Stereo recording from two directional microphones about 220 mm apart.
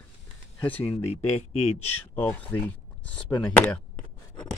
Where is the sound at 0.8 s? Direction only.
30° left (ahead or behind).